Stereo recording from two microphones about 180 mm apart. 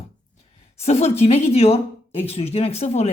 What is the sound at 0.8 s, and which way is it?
A woman's voice, 35° left (ahead or behind).